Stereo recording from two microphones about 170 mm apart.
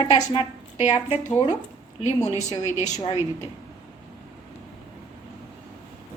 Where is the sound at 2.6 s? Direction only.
45° left (ahead or behind).